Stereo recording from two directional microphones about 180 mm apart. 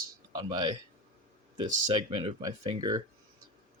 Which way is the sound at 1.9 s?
25° right (ahead or behind).